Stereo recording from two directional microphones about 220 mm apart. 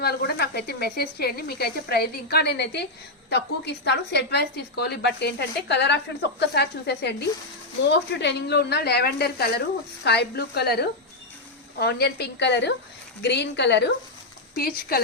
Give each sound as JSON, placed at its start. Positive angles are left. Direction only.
{"t": 0.0, "sound": "a woman's voice", "side_deg": 45}